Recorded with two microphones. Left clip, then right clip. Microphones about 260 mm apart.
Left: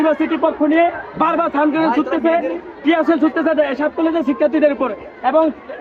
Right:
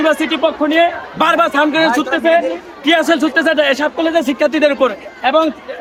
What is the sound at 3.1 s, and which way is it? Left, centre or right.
Speech, right.